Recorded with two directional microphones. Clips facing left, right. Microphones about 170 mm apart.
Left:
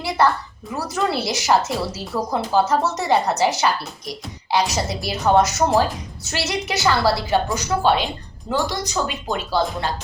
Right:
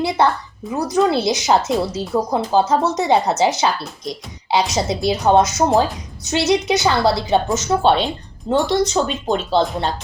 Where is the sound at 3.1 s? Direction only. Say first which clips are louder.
Right 2 dB; 20° right (ahead or behind).